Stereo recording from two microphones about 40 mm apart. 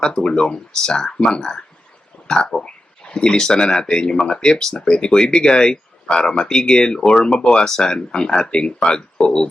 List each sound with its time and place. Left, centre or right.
0.0 s speech: centre
2.2 s a sound: centre
3.3 s speech: centre